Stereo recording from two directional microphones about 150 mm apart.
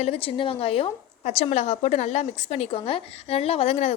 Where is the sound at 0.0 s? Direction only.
40° left (ahead or behind).